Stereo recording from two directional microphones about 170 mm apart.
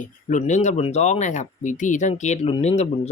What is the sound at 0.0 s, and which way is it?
Speech, 45° left (ahead or behind).